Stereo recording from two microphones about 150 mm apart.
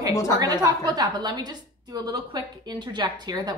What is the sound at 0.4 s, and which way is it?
A woman's voice, 25° right (ahead or behind).